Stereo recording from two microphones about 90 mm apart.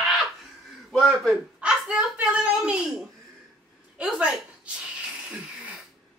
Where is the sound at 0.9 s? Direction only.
5° left (ahead or behind).